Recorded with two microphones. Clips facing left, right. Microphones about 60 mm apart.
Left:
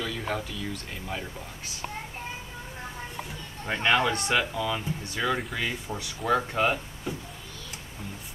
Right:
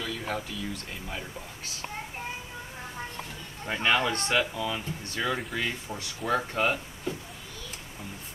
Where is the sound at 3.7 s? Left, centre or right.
Centre.